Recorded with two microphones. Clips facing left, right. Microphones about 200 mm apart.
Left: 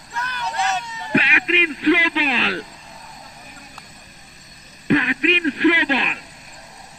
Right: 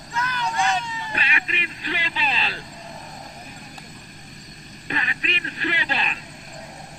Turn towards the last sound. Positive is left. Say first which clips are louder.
# left 10 dB
turn(degrees=65)  # may be behind; listen again after turning